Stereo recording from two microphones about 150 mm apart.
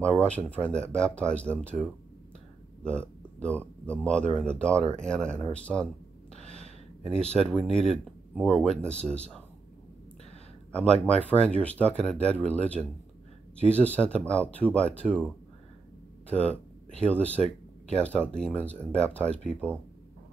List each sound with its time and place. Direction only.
0.0 s a man's voice: 10° left (ahead or behind)
6.5 s a sound: 45° right (ahead or behind)
7.3 s speech: 5° left (ahead or behind)
10.7 s speech: 5° left (ahead or behind)